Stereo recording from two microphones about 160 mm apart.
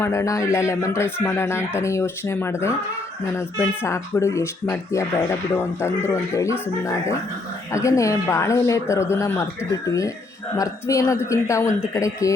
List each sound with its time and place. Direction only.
0.0 s speech: 20° left (ahead or behind)